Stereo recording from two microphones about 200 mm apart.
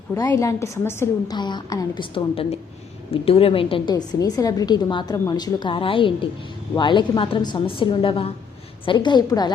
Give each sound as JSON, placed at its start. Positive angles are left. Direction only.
{"t": 0.1, "sound": "a woman's voice", "side_deg": 15}